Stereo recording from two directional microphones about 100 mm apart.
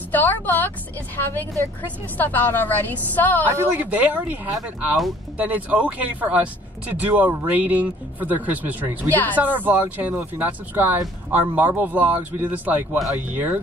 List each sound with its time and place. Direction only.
0.1 s a woman's voice: 20° left (ahead or behind)
3.4 s speech: 20° right (ahead or behind)
5.4 s speech: 15° right (ahead or behind)
9.1 s speech: 15° left (ahead or behind)
9.4 s speech: 15° right (ahead or behind)